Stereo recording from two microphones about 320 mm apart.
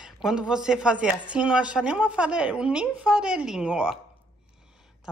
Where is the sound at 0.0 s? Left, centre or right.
Centre.